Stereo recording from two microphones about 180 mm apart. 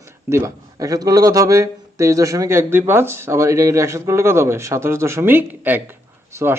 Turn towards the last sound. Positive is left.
turn(degrees=-15)  # may be behind; listen again after turning